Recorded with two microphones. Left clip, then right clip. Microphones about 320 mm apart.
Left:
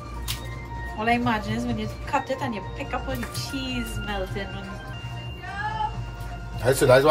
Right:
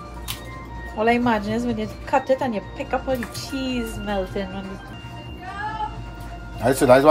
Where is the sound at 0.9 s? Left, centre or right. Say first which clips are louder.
Right 4 dB; centre.